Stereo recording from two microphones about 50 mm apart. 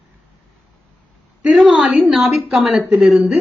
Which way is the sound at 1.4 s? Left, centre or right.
Centre.